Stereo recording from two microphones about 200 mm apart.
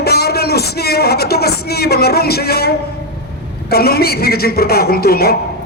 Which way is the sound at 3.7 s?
50° left (ahead or behind).